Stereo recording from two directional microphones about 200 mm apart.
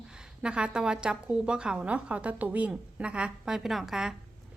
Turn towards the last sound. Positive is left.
turn(degrees=0)  # may be behind; listen again after turning